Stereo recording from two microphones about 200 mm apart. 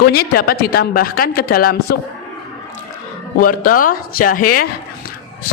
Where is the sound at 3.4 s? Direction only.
45° left (ahead or behind).